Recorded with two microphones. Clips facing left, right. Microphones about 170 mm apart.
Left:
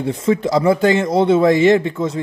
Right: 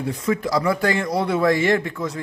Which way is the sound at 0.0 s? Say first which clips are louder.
Left 5 dB; 25° left (ahead or behind).